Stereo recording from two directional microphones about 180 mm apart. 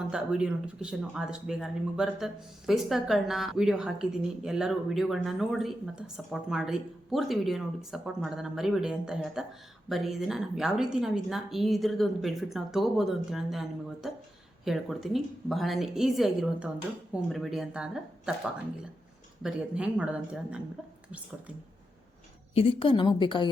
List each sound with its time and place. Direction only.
0.0 s speech: 5° right (ahead or behind)
19.4 s speech: 5° right (ahead or behind)
22.5 s a woman's voice: 30° left (ahead or behind)